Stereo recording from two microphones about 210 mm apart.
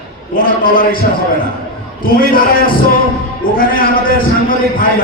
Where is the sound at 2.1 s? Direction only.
45° left (ahead or behind).